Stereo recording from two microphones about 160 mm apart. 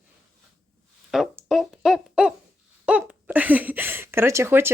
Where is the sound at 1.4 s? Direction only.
Centre (ahead or behind).